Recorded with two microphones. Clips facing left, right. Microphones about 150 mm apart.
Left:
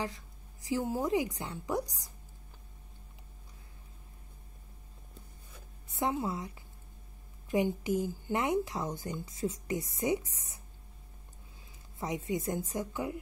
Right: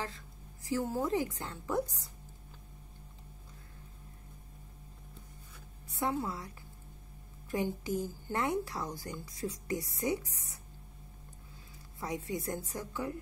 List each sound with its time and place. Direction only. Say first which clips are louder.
0.0 s a woman's voice: left 3 dB; 15° left (ahead or behind)
5.9 s a woman's voice: left 2 dB; 20° left (ahead or behind)
7.5 s a woman's voice: left 4 dB; 15° left (ahead or behind)
12.0 s a woman's voice: left 3 dB; 20° left (ahead or behind)